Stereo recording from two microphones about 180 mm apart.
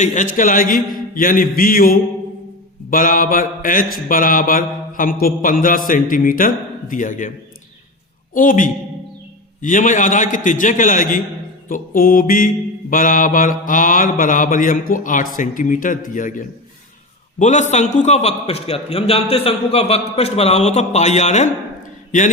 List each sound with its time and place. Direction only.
0.0 s a man's voice: 45° left (ahead or behind)